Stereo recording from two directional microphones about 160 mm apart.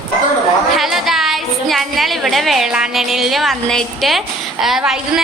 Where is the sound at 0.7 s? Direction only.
Centre (ahead or behind).